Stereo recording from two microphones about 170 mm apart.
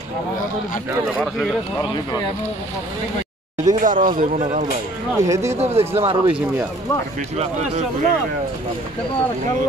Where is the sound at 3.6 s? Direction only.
50° right (ahead or behind).